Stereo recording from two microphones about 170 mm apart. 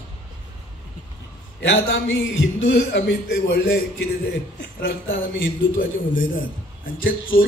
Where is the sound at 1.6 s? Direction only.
90° left.